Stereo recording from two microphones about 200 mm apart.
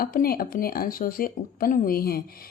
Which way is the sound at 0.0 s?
50° left (ahead or behind).